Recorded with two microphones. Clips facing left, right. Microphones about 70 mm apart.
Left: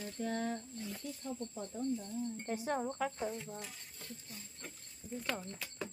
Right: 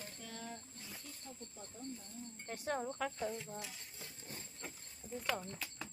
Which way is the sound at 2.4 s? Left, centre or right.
Centre.